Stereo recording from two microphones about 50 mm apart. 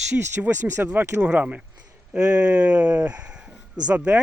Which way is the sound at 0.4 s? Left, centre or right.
Right.